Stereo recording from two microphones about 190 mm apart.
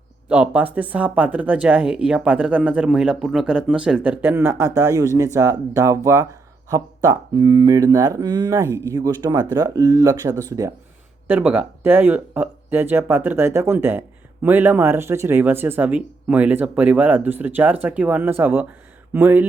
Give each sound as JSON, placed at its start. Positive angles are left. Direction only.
{"t": 0.3, "sound": "speech", "side_deg": -5}